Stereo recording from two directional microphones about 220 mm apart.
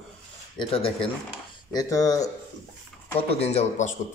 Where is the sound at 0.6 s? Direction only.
25° left (ahead or behind).